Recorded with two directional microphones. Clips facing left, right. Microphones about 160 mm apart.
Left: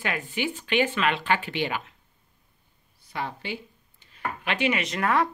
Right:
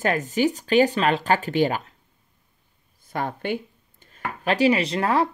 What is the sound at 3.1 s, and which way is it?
Speech, 50° right (ahead or behind).